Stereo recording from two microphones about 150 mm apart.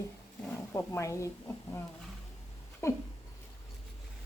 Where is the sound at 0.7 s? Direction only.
20° left (ahead or behind).